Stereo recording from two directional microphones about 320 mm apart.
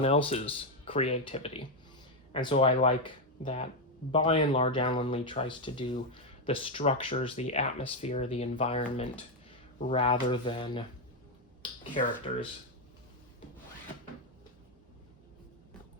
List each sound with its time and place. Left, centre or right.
0.0 s speech: centre